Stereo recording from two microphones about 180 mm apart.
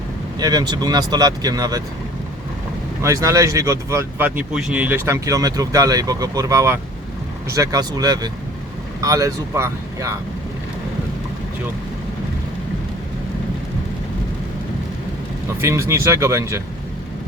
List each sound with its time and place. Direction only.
0.3 s speech: 20° right (ahead or behind)
3.0 s speech: 15° right (ahead or behind)
15.6 s speech: 15° right (ahead or behind)